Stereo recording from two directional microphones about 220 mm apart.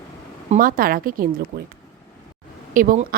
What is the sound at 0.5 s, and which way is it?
Speech, 40° right (ahead or behind).